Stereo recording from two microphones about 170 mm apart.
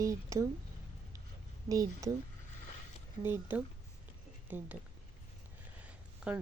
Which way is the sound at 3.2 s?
10° right (ahead or behind).